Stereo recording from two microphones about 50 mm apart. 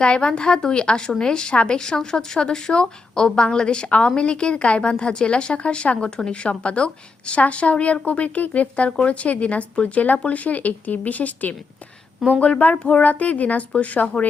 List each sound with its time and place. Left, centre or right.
0.0 s a woman's voice: centre